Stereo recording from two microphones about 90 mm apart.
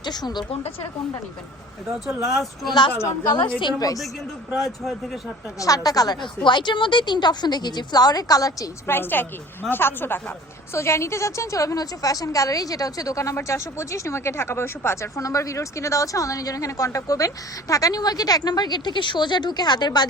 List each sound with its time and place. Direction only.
0.0 s speech: 50° left (ahead or behind)
2.2 s a man's voice: centre (ahead or behind)
2.9 s speech: 25° left (ahead or behind)
3.6 s a woman's voice: 50° left (ahead or behind)
4.5 s a man's voice: centre (ahead or behind)
5.5 s a woman's voice: 40° left (ahead or behind)
6.4 s a woman's voice: 60° left (ahead or behind); by 8.7 s 40° left (ahead or behind)
8.9 s a woman's voice: 25° left (ahead or behind); by 20.1 s 55° left (ahead or behind)